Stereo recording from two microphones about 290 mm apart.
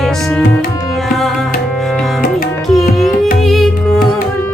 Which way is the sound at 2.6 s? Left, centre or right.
Centre.